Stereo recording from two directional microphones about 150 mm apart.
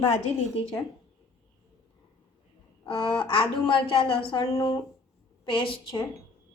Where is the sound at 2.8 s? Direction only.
35° left (ahead or behind).